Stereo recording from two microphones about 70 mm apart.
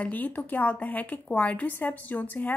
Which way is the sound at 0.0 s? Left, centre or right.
Left.